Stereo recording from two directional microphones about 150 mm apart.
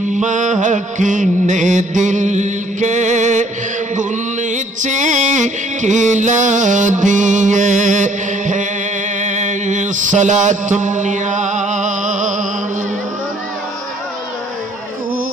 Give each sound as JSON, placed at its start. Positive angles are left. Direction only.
{"t": 0.1, "sound": "music", "side_deg": -55}
{"t": 9.2, "sound": "mantra", "side_deg": -55}